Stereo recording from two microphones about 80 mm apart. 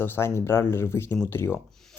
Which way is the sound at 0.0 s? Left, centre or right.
Left.